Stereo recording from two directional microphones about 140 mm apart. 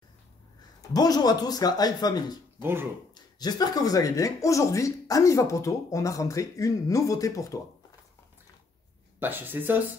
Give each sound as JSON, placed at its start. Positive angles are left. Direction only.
{"t": 0.9, "sound": "speech", "side_deg": 30}
{"t": 2.6, "sound": "speech", "side_deg": -15}
{"t": 3.2, "sound": "speech", "side_deg": 30}
{"t": 9.2, "sound": "speech", "side_deg": -15}